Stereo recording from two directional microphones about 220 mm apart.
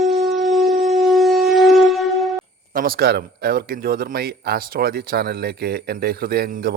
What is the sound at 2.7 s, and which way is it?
Speech, 40° right (ahead or behind).